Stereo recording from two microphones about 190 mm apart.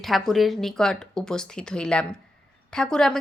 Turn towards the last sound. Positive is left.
turn(degrees=5)  # may be behind; listen again after turning